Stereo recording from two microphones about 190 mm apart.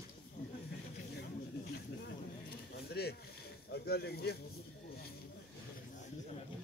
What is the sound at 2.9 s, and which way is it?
Snake, 55° left (ahead or behind).